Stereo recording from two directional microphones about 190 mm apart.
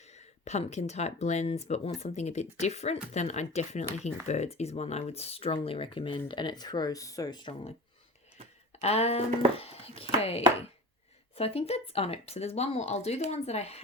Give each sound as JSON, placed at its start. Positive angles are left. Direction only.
{"t": 0.4, "sound": "speech", "side_deg": 35}
{"t": 8.8, "sound": "speech", "side_deg": 35}